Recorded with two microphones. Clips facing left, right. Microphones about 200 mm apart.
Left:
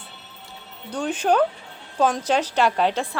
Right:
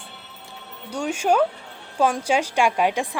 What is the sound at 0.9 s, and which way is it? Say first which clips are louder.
Speech: even; 10° right (ahead or behind).